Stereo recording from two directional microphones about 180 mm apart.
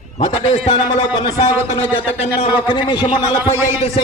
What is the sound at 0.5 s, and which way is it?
A man's voice, 35° left (ahead or behind).